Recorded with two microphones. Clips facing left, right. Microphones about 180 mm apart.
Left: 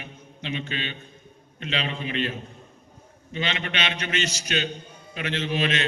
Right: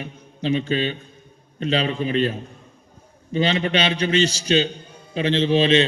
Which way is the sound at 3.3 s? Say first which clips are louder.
Right 9 dB; 35° right (ahead or behind).